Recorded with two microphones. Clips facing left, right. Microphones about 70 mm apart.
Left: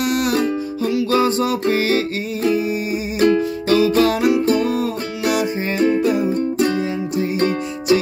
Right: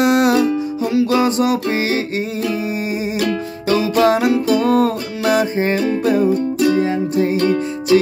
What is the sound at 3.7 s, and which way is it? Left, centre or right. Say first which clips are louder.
Music: right 1 dB; right.